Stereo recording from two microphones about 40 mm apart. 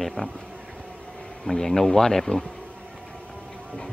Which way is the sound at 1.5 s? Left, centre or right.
Centre.